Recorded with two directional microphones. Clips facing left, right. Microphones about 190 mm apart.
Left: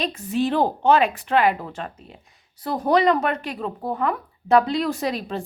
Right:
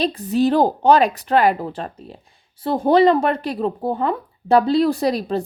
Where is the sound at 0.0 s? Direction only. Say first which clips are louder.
Right 5 dB; 35° right (ahead or behind).